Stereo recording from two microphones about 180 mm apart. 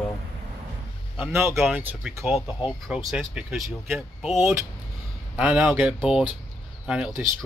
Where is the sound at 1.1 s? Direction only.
5° right (ahead or behind).